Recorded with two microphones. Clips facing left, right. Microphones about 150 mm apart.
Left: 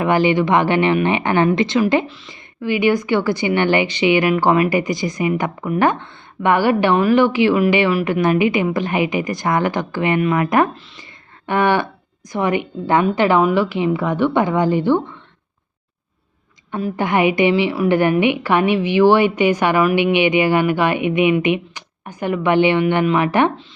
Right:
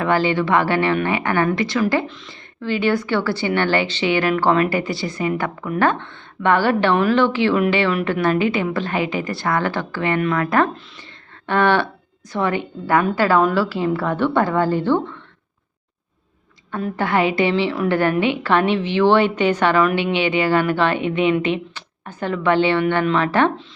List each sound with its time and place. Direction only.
0.0 s a woman's voice: 15° left (ahead or behind)
2.0 s a woman's voice: 5° left (ahead or behind)
17.0 s a woman's voice: 15° left (ahead or behind)